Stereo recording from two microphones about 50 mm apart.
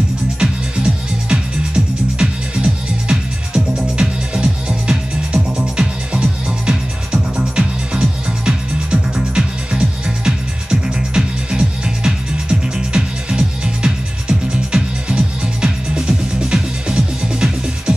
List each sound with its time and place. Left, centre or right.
0.4 s music: centre